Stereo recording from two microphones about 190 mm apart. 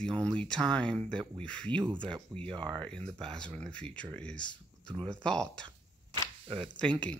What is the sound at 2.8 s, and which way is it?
Speech, 5° left (ahead or behind).